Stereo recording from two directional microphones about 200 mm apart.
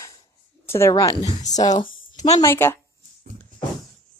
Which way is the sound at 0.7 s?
15° left (ahead or behind).